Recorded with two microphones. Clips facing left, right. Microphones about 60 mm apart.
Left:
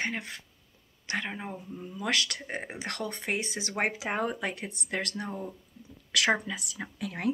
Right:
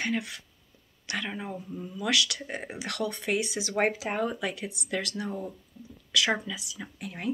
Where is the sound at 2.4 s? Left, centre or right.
Left.